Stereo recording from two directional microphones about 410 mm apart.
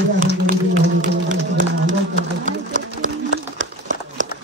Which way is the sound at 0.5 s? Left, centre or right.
Right.